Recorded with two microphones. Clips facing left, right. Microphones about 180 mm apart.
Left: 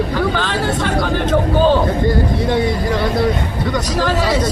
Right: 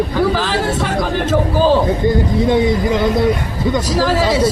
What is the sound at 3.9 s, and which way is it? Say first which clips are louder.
Speech: right 2 dB; 5° right (ahead or behind).